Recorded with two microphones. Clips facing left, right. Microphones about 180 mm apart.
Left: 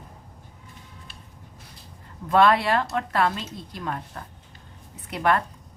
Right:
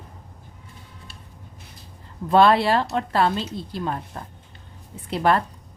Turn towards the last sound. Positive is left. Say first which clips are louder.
# right 3 dB
turn(degrees=-30)  # may be behind; listen again after turning